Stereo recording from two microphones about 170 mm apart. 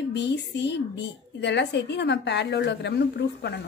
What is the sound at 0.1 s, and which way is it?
A woman's voice, 90° left.